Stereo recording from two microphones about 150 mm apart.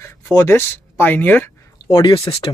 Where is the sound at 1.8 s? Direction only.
35° left (ahead or behind).